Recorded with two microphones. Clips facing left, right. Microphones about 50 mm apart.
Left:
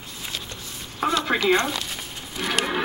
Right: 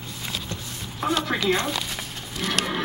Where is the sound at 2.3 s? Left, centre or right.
Centre.